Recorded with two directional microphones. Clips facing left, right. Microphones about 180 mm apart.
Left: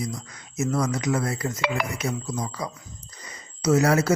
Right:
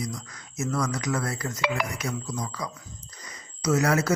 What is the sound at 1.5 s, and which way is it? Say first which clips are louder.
Speech: right 2 dB; 55° left (ahead or behind).